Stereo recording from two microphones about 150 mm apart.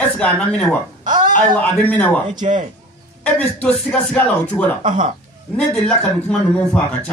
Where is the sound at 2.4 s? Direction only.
55° right (ahead or behind).